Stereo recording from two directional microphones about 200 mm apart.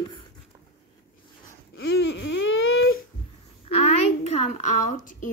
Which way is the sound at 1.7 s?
60° left (ahead or behind).